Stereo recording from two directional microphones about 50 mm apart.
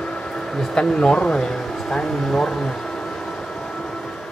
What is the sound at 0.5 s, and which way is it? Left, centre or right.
Speech, centre.